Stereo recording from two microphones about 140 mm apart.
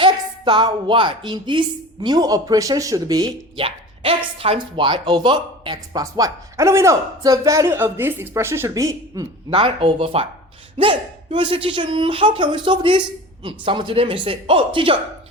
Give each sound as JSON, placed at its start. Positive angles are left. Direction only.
{"t": 0.0, "sound": "speech", "side_deg": -35}
{"t": 3.6, "sound": "speech", "side_deg": -40}
{"t": 9.5, "sound": "speech", "side_deg": -40}